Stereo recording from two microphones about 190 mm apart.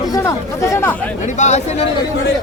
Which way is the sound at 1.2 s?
40° left (ahead or behind).